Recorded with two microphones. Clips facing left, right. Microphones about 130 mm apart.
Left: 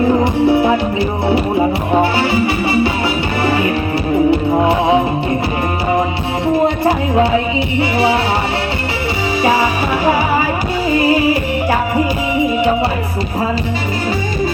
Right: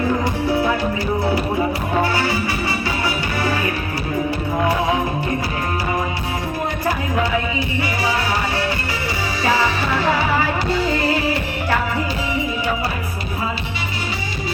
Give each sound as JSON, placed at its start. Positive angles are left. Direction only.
{"t": 0.4, "sound": "music", "side_deg": 20}
{"t": 2.0, "sound": "music", "side_deg": 20}
{"t": 3.4, "sound": "music", "side_deg": 20}
{"t": 9.4, "sound": "music", "side_deg": 15}
{"t": 10.8, "sound": "music", "side_deg": 10}